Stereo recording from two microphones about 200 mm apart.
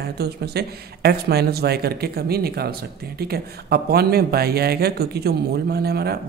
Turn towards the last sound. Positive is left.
turn(degrees=-50)  # may be behind; listen again after turning